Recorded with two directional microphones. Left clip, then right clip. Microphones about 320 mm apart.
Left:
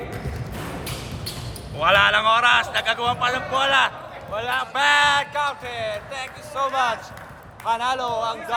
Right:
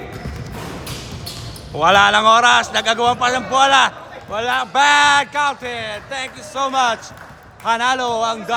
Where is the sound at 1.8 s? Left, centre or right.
Centre.